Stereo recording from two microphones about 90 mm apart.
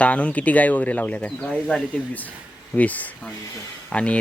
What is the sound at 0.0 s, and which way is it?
Speech, 15° left (ahead or behind).